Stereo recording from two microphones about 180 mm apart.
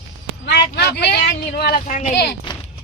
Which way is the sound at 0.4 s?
70° left (ahead or behind).